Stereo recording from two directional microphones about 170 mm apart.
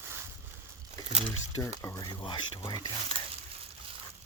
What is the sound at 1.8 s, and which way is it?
Speech, 20° left (ahead or behind).